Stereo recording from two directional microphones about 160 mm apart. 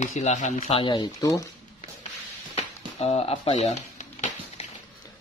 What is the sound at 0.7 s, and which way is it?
Speech, 30° left (ahead or behind).